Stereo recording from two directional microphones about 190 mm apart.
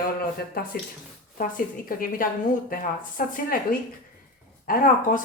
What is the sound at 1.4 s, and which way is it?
Speech, 45° left (ahead or behind).